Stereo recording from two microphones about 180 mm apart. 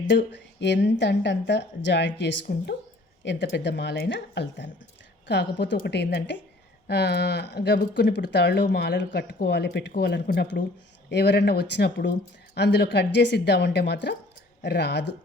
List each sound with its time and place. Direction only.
0.1 s speech: 75° left (ahead or behind)